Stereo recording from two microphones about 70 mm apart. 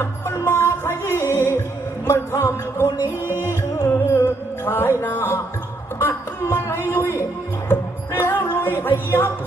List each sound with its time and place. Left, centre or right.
0.0 s music: left
2.0 s a sound: left
3.4 s music: left
3.9 s music: left